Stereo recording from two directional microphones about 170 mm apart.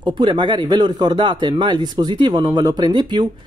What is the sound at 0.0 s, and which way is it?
Speech, 30° right (ahead or behind).